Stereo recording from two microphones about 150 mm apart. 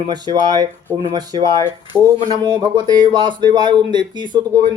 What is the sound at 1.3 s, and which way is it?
Mantra, 30° right (ahead or behind).